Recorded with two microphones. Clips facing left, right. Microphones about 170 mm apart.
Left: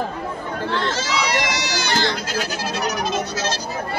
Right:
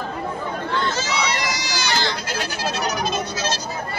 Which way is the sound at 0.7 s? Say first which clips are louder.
Left 2 dB; 85° left.